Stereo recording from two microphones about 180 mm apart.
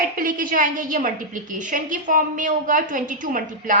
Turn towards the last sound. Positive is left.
turn(degrees=-50)  # may be behind; listen again after turning